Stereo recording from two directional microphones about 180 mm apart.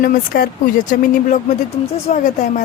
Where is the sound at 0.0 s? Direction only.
50° left (ahead or behind).